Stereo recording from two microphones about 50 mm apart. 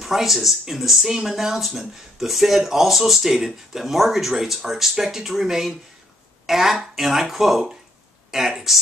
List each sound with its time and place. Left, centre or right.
0.0 s speech: centre